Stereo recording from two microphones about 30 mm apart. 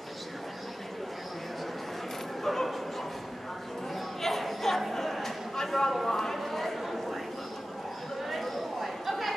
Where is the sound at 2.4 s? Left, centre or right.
Centre.